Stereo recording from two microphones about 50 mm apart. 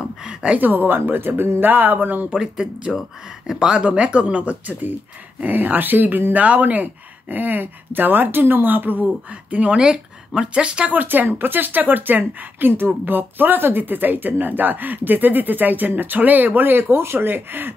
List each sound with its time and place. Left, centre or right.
0.0 s a sound: centre
0.6 s speech: right
2.3 s speech: centre
2.9 s speech: centre
3.5 s speech: centre; by 9.0 s right
9.3 s speech: right
10.9 s speech: right